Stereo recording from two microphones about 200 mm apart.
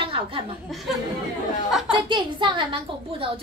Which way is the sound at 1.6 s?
Centre (ahead or behind).